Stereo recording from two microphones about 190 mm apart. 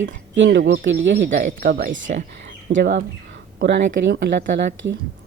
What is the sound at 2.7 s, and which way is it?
Speech, 70° right (ahead or behind).